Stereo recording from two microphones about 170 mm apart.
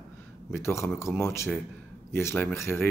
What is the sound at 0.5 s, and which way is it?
Speech, 15° left (ahead or behind).